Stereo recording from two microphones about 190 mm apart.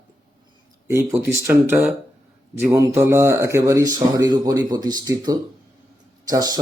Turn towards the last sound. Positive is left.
turn(degrees=-20)  # may be behind; listen again after turning